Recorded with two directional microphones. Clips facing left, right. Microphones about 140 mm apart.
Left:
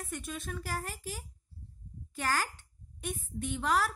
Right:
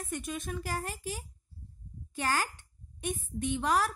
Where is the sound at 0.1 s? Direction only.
20° right (ahead or behind).